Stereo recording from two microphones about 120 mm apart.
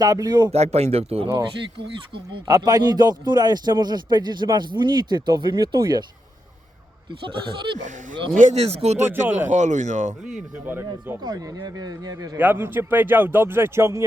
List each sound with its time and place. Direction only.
0.0 s a man's voice: 30° right (ahead or behind)
0.5 s speech: 65° right (ahead or behind)
2.5 s a man's voice: 30° right (ahead or behind)
7.1 s speech: 45° right (ahead or behind)
8.4 s speech: 75° right (ahead or behind)
9.5 s speech: 85° right
10.7 s a man's voice: 15° right (ahead or behind)
11.2 s a man's voice: 30° right (ahead or behind)
12.4 s a man's voice: 15° right (ahead or behind)